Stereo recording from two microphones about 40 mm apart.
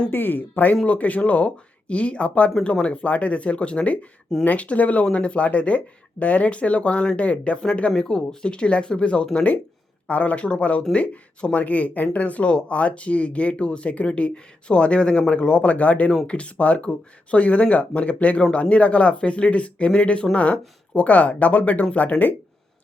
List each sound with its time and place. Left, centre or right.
0.1 s speech: left
10.1 s speech: left
10.3 s speech: left
20.3 s speech: left